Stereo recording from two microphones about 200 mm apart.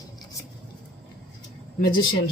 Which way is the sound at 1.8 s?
45° left (ahead or behind).